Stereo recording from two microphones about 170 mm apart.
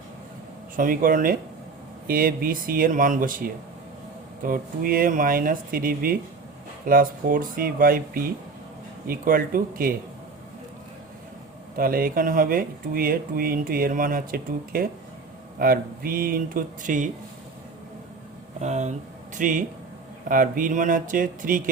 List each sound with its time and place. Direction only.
0.8 s speech: 55° right (ahead or behind)
11.8 s speech: 60° right (ahead or behind)
18.6 s speech: 45° right (ahead or behind)